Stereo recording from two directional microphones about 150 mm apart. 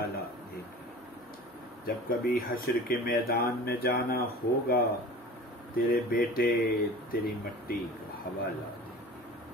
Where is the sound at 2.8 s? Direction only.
80° left.